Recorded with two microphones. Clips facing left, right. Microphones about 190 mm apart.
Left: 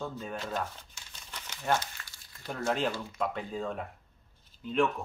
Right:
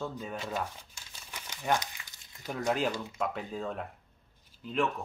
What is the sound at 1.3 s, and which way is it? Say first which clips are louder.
Crumpling: even; 10° right (ahead or behind).